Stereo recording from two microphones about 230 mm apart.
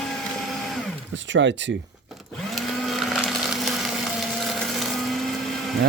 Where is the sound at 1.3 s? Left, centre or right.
Right.